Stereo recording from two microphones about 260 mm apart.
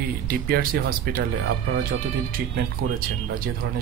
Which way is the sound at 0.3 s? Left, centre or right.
Right.